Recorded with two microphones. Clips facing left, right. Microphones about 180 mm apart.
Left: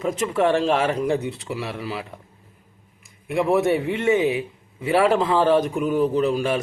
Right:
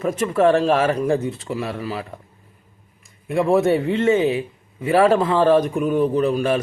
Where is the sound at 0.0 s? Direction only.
20° left (ahead or behind).